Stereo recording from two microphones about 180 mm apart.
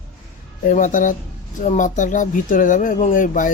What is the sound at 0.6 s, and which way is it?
Speech, 45° left (ahead or behind).